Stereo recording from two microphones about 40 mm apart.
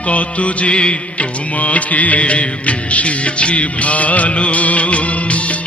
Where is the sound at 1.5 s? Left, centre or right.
Left.